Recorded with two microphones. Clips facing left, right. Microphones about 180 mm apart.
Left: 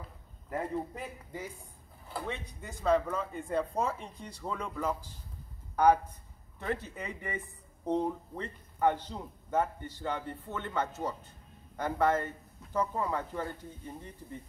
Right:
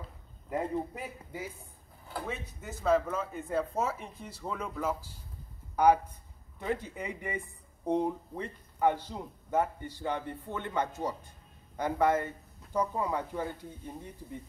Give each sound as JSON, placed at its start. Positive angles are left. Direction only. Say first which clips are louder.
{"t": 0.7, "sound": "speech", "louder": "right 1 dB", "side_deg": -10}